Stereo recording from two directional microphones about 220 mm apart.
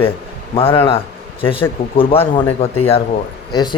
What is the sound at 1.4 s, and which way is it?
Speech, 25° left (ahead or behind).